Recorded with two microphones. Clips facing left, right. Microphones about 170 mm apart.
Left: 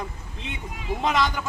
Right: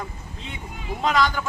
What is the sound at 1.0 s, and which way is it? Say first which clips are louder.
Speech: right 2 dB; 20° left (ahead or behind).